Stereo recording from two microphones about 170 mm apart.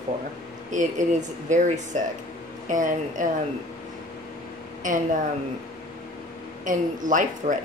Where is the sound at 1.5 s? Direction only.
45° right (ahead or behind).